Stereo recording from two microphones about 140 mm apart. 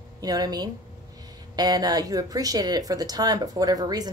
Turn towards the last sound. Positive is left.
turn(degrees=-30)  # may be behind; listen again after turning